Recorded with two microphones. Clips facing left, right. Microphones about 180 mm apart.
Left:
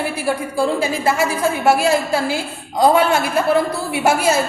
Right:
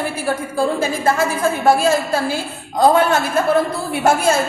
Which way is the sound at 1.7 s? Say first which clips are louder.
Right 1 dB; 15° left (ahead or behind).